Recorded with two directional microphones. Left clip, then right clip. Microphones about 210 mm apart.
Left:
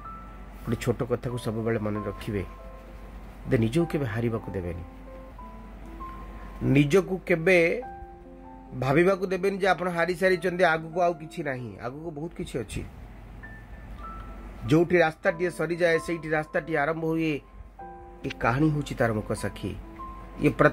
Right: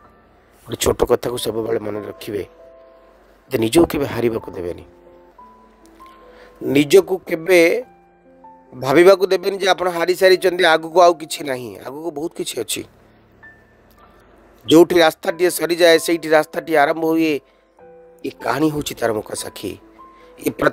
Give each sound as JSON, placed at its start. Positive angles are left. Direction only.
{"t": 0.7, "sound": "a man's voice", "side_deg": -55}
{"t": 3.4, "sound": "a man's voice", "side_deg": -55}
{"t": 6.7, "sound": "a man's voice", "side_deg": -50}
{"t": 14.7, "sound": "speech", "side_deg": -60}
{"t": 18.5, "sound": "a man's voice", "side_deg": -55}